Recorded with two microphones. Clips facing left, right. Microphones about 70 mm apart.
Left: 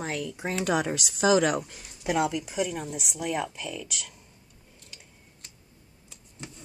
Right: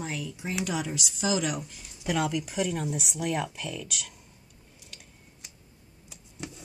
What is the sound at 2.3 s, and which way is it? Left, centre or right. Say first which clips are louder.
Speech: even; centre.